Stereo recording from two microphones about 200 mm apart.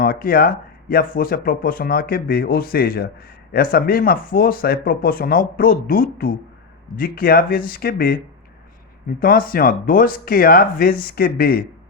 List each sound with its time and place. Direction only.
0.0 s speech: 45° left (ahead or behind)
9.2 s speech: 45° left (ahead or behind)